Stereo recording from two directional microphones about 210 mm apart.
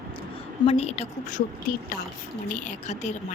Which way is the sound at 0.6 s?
30° left (ahead or behind).